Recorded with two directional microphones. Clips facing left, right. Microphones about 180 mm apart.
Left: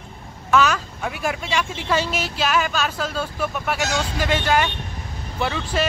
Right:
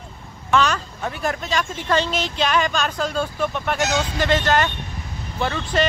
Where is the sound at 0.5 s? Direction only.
5° left (ahead or behind).